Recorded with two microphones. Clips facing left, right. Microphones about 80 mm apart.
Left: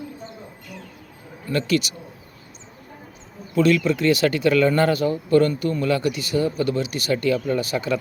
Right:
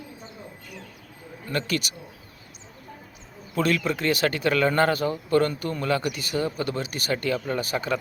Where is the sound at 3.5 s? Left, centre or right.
Right.